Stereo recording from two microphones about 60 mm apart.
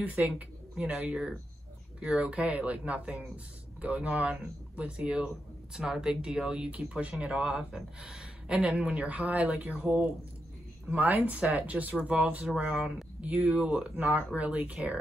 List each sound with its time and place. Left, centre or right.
0.0 s speech: right
11.0 s speech: right
13.5 s speech: centre
13.9 s speech: right